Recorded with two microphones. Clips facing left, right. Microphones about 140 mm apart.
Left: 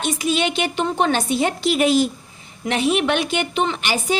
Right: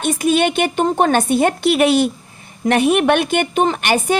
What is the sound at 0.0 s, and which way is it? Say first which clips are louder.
A woman's voice: right 5 dB; 55° right (ahead or behind).